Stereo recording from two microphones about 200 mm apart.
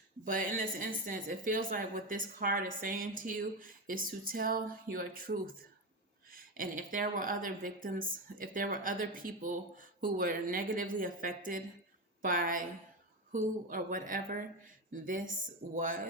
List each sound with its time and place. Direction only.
0.3 s a woman's voice: 45° right (ahead or behind)